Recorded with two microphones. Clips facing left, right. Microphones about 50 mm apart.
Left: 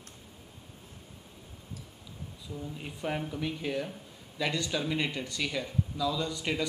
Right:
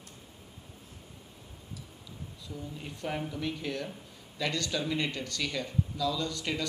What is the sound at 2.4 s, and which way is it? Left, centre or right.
Speech, centre.